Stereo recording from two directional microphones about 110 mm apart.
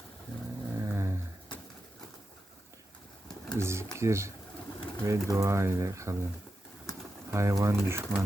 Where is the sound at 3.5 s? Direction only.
25° right (ahead or behind).